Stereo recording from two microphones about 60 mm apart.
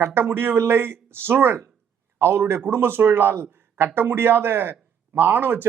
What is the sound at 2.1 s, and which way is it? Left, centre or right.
A man's voice, right.